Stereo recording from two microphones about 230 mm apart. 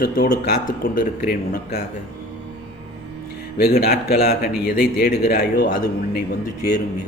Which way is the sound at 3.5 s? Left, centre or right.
Left.